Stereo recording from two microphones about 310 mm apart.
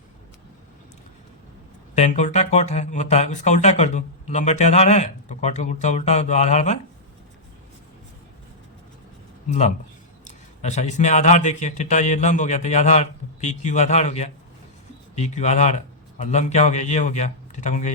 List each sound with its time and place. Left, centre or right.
2.0 s speech: left
9.5 s a man's voice: left